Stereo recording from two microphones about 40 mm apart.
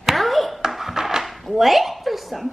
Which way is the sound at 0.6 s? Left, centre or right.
Centre.